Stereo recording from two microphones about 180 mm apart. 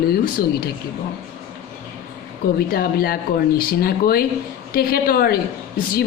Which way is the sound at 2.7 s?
55° left (ahead or behind).